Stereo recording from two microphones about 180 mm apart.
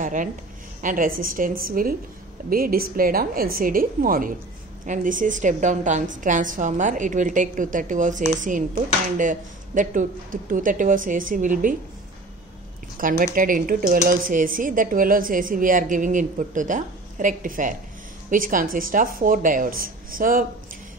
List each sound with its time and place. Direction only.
0.0 s a woman's voice: 45° right (ahead or behind)
13.2 s speech: 50° right (ahead or behind)